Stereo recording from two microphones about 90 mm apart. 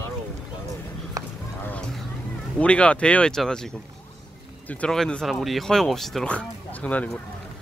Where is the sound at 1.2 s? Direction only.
40° right (ahead or behind).